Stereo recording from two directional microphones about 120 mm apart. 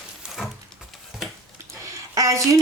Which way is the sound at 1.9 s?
25° right (ahead or behind).